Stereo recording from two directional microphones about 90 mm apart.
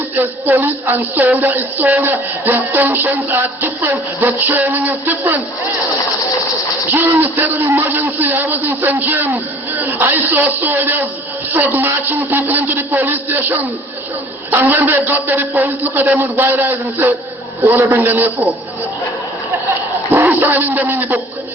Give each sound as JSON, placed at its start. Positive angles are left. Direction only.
{"t": 0.2, "sound": "speech", "side_deg": -20}
{"t": 6.9, "sound": "speech", "side_deg": -20}
{"t": 20.2, "sound": "speech", "side_deg": -20}